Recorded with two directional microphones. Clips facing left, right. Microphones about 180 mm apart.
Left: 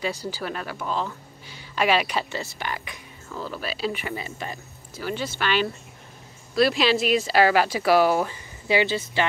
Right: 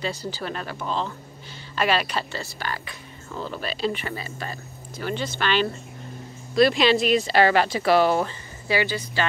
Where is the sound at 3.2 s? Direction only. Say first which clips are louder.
Right 1 dB; centre (ahead or behind); by 4.6 s 15° left (ahead or behind).